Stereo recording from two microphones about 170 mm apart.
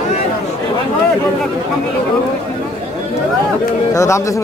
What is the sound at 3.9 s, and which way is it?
Speech, 20° left (ahead or behind).